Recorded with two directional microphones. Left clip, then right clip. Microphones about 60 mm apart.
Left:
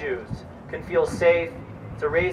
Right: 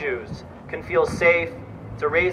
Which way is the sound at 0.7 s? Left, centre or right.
Right.